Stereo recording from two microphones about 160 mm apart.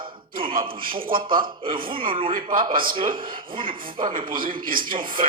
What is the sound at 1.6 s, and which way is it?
Speech, 35° right (ahead or behind).